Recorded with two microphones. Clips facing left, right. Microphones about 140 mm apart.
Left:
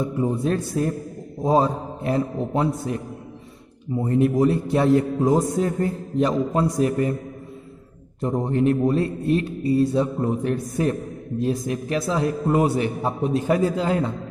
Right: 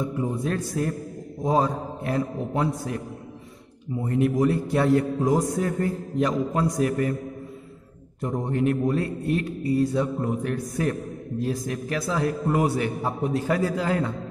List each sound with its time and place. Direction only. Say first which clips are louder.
0.2 s speech: left 6 dB; 25° left (ahead or behind)
8.2 s speech: left 4 dB; 30° left (ahead or behind)